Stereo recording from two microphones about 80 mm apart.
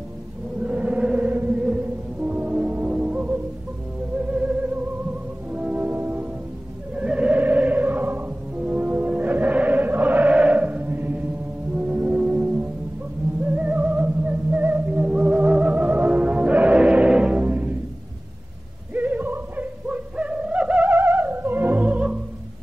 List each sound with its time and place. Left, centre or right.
0.6 s music: centre
4.2 s theremin: centre
5.5 s music: centre
18.9 s music: right